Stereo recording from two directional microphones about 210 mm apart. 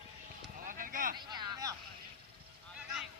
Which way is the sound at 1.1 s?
20° right (ahead or behind).